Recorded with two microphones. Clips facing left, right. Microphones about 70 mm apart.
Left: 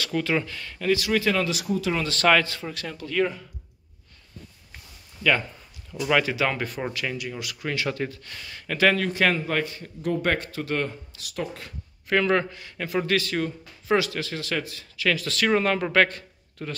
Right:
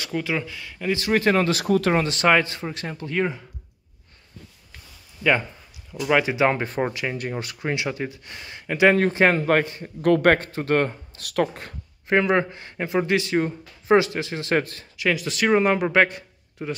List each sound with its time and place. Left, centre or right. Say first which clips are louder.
0.1 s speech: even; centre
0.9 s speech: right 5 dB; right
2.0 s a man's voice: right 1 dB; right
5.9 s a man's voice: right 2 dB; centre
7.2 s a man's voice: right 4 dB; right; by 8.9 s centre
8.9 s a man's voice: right 5 dB; right
10.0 s speech: right 8 dB; right
10.3 s speech: right 6 dB; right
11.5 s a man's voice: right 2 dB; right
14.6 s speech: right 5 dB; right
15.0 s a man's voice: right 2 dB; centre